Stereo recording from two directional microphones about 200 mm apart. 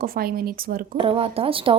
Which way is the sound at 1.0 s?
25° right (ahead or behind).